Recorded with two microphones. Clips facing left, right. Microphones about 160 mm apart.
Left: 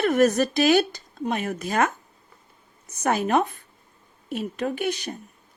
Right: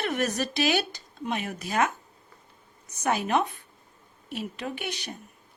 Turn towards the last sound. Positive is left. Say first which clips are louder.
# left 8 dB
turn(degrees=45)  # may be behind; listen again after turning